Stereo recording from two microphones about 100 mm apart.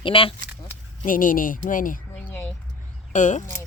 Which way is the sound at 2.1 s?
15° left (ahead or behind).